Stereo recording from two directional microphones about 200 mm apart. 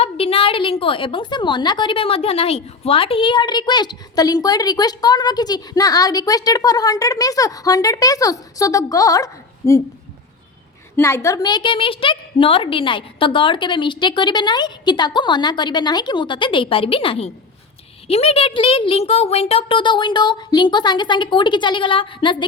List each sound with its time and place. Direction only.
0.0 s a woman's voice: 30° left (ahead or behind)
10.9 s a woman's voice: 15° left (ahead or behind)